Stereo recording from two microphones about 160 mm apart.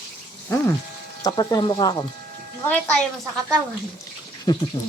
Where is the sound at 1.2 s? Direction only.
25° left (ahead or behind).